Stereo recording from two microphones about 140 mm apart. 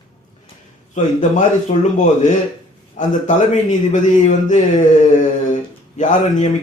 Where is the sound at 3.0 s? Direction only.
60° left (ahead or behind).